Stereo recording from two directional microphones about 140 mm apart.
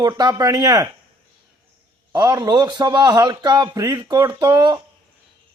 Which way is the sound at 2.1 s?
25° right (ahead or behind).